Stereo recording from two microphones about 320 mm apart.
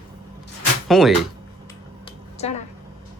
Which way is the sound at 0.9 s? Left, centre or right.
Centre.